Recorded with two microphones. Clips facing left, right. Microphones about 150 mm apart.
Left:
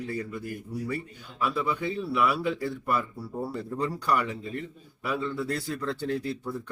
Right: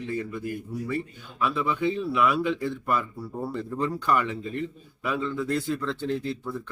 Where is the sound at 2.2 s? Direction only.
10° left (ahead or behind).